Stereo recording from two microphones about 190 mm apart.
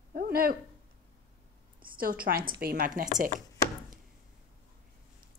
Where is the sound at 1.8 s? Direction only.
50° right (ahead or behind).